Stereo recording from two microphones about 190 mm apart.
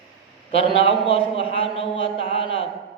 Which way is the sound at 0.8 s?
30° left (ahead or behind).